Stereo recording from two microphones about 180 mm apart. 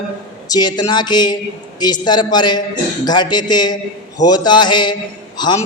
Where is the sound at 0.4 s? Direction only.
20° left (ahead or behind).